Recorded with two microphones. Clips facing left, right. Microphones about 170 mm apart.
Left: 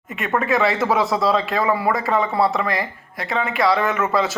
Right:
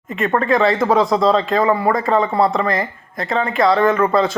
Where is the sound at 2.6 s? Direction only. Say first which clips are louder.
Right 4 dB; 45° right (ahead or behind).